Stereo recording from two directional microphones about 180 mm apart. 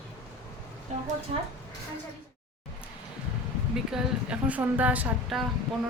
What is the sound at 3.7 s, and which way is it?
A woman's voice, 5° right (ahead or behind).